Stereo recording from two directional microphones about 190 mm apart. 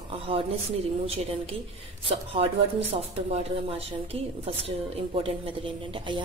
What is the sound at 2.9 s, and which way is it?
Speech, 30° right (ahead or behind).